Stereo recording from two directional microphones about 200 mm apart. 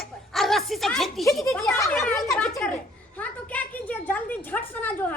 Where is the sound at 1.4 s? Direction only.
15° left (ahead or behind).